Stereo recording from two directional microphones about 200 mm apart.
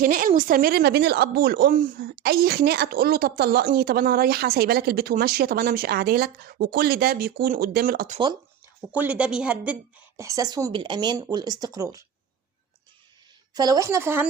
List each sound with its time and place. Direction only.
0.0 s speech: 45° right (ahead or behind)
8.9 s speech: 5° right (ahead or behind)
10.2 s speech: 15° right (ahead or behind)
13.5 s speech: 20° right (ahead or behind)